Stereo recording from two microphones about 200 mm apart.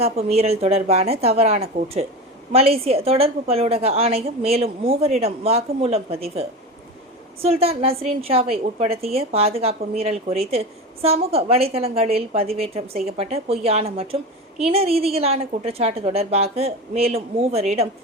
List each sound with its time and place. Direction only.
0.0 s a woman's voice: 30° right (ahead or behind)